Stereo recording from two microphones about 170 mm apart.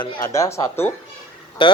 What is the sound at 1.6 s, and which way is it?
Speech, 30° left (ahead or behind).